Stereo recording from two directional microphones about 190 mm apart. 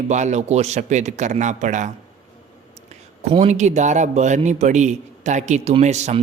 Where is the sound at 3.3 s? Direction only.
35° right (ahead or behind).